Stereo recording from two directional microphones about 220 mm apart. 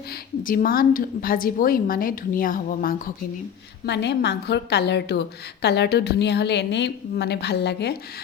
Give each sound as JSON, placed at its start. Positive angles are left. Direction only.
{"t": 0.1, "sound": "a woman's voice", "side_deg": 40}
{"t": 3.8, "sound": "a woman's voice", "side_deg": 50}